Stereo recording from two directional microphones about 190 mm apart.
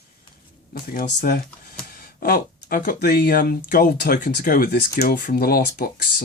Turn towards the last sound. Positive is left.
turn(degrees=50)  # may be behind; listen again after turning